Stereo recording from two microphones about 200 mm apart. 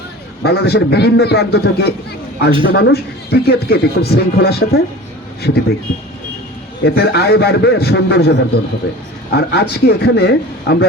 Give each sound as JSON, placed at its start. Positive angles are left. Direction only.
{"t": 0.4, "sound": "speech", "side_deg": 55}
{"t": 2.5, "sound": "a man's voice", "side_deg": -25}
{"t": 2.7, "sound": "speech", "side_deg": 55}
{"t": 6.8, "sound": "speech", "side_deg": 55}